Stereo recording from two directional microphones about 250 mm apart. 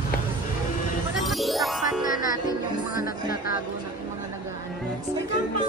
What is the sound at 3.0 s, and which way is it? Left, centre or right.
Speech, left.